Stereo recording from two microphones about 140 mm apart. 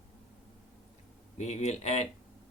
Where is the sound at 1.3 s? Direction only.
55° left (ahead or behind).